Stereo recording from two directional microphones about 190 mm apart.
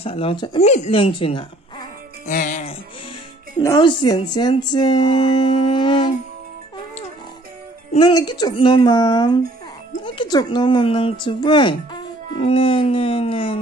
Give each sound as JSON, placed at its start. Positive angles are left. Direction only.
{"t": 0.0, "sound": "speech", "side_deg": 30}
{"t": 2.2, "sound": "music", "side_deg": 45}
{"t": 3.6, "sound": "speech", "side_deg": 25}
{"t": 8.0, "sound": "speech", "side_deg": 20}